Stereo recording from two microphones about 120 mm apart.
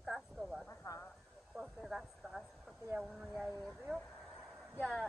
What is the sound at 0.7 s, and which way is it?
Female singing, 25° left (ahead or behind).